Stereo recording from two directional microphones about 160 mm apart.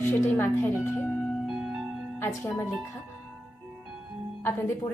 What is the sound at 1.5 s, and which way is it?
Music, 5° right (ahead or behind).